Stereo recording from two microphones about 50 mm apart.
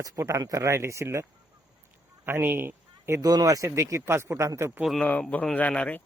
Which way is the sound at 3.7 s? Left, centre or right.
Right.